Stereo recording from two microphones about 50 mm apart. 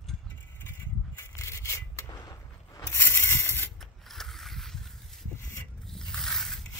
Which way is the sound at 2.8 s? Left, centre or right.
Left.